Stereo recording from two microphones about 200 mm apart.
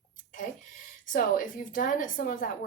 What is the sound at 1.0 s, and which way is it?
Speech, 40° left (ahead or behind).